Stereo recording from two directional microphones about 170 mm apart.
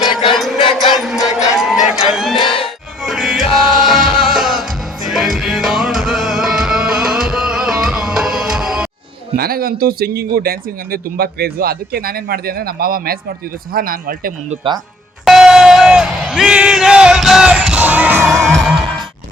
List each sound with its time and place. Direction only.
0.0 s chant: 30° left (ahead or behind)
0.9 s a sound: centre (ahead or behind)
1.9 s music: centre (ahead or behind)
9.3 s speech: 65° right (ahead or behind)
15.2 s crowd: centre (ahead or behind)
18.3 s music: centre (ahead or behind)